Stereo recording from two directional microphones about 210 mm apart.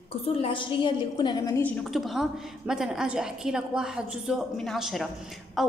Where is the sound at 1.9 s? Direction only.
Centre (ahead or behind).